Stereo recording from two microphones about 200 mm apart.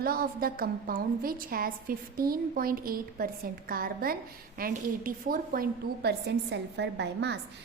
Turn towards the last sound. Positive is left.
turn(degrees=-60)  # may be behind; listen again after turning